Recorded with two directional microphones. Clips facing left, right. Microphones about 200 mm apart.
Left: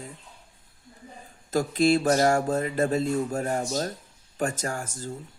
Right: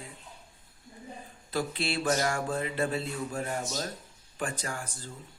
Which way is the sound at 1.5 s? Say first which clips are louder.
Left 10 dB; 45° left (ahead or behind).